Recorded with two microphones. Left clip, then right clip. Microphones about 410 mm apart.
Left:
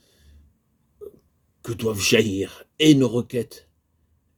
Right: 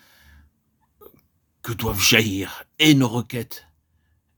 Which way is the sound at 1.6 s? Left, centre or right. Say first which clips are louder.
Right 3 dB; right.